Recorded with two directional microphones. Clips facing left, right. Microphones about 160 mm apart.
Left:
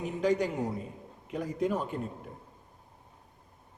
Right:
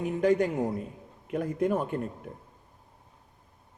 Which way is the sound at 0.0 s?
55° right (ahead or behind).